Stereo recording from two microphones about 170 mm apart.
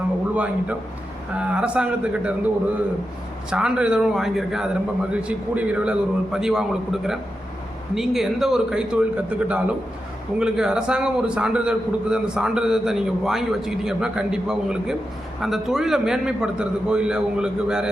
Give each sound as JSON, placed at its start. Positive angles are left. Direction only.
{"t": 0.3, "sound": "a man's voice", "side_deg": -10}
{"t": 3.5, "sound": "a man's voice", "side_deg": -5}